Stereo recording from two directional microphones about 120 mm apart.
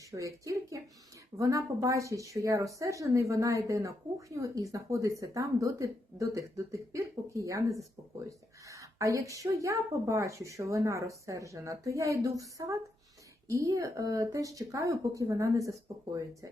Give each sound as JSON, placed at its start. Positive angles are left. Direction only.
{"t": 0.1, "sound": "a woman's voice", "side_deg": -25}